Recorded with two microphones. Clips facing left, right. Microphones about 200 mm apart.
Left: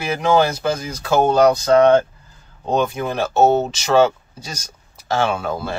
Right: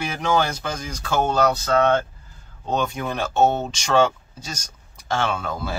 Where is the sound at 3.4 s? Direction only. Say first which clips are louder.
Left 5 dB; 45° left (ahead or behind).